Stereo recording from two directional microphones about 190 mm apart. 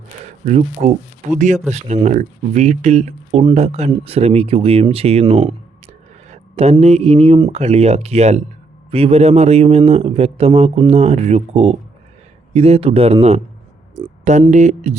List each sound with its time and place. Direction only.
0.4 s a man's voice: 40° right (ahead or behind)
13.9 s a sound: 35° right (ahead or behind)
14.5 s a man's voice: 35° right (ahead or behind)